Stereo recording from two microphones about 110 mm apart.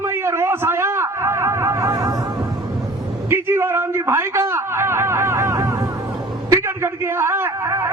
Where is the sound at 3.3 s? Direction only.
20° right (ahead or behind).